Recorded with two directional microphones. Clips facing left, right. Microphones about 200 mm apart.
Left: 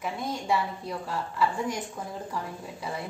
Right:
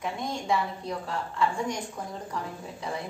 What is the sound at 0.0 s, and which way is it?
A woman's voice, 5° left (ahead or behind).